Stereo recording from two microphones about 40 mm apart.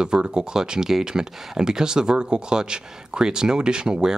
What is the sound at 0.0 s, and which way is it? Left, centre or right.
Speech, right.